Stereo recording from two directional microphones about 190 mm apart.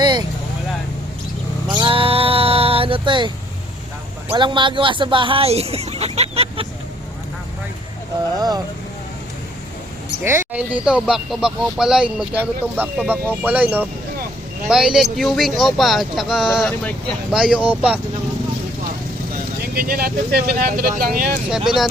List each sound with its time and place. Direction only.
0.0 s vehicle: 20° right (ahead or behind)
1.7 s sheep: 25° right (ahead or behind)
4.3 s speech: 25° right (ahead or behind)
8.4 s speech: 20° right (ahead or behind)
10.2 s speech: 10° right (ahead or behind)
19.7 s speech: 50° right (ahead or behind)